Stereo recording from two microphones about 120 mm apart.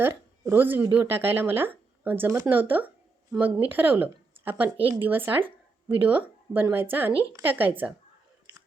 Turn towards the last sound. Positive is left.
turn(degrees=-15)  # may be behind; listen again after turning